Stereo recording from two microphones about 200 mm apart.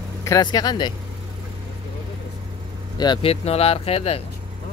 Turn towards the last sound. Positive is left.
turn(degrees=30)  # may be behind; listen again after turning